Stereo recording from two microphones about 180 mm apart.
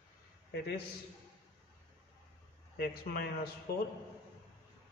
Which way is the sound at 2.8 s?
55° left (ahead or behind).